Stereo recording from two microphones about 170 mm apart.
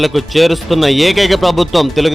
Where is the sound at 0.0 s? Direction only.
Centre (ahead or behind).